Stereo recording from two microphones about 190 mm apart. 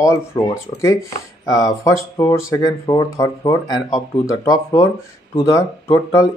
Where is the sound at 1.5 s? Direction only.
15° left (ahead or behind).